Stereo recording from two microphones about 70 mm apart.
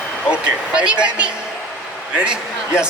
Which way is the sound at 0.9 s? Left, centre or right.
Centre.